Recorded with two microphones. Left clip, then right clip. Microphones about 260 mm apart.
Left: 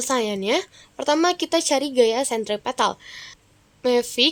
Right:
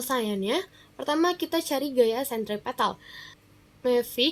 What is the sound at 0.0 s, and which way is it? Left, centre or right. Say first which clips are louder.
A woman's voice: left 5 dB; left.